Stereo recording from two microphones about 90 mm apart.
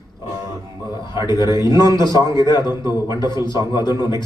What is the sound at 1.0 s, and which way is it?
A man's voice, 50° left (ahead or behind).